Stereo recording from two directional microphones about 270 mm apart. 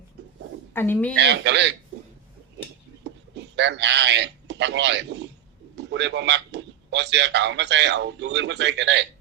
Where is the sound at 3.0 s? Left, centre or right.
Right.